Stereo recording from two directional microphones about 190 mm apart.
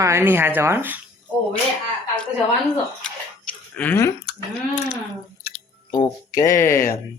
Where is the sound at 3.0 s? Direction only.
5° left (ahead or behind).